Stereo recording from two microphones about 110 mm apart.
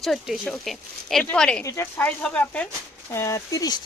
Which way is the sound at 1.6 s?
25° left (ahead or behind).